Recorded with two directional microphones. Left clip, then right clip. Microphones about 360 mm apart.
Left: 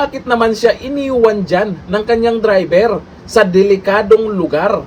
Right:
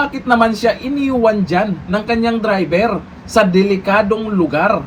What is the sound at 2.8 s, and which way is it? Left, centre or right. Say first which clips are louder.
Speech: left 4 dB; centre.